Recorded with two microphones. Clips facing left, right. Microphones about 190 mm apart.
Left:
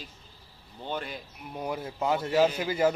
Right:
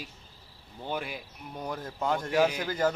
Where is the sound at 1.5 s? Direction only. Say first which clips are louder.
Left 3 dB; 10° left (ahead or behind).